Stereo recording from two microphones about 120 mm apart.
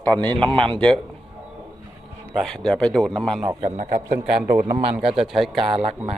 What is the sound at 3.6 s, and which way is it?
Speech, 70° right (ahead or behind).